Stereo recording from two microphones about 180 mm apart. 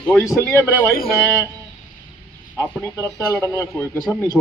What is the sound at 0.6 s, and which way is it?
Speech, 10° right (ahead or behind).